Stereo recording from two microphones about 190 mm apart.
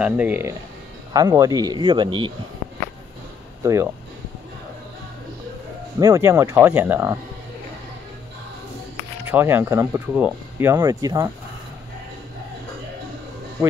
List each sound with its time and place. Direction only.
0.0 s a man's voice: 10° right (ahead or behind); by 2.3 s 25° right (ahead or behind)
3.6 s speech: 15° right (ahead or behind)
5.9 s speech: 15° right (ahead or behind)
9.2 s speech: 10° right (ahead or behind)